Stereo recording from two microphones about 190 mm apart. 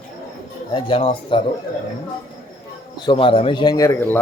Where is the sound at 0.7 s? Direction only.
25° left (ahead or behind).